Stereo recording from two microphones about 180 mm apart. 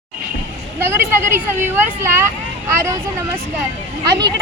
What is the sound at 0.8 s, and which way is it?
Speech, 10° right (ahead or behind).